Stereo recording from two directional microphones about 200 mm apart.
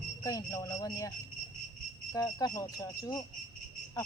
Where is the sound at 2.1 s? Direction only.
20° left (ahead or behind).